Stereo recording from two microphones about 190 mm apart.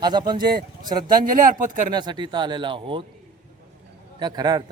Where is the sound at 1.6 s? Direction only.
40° right (ahead or behind).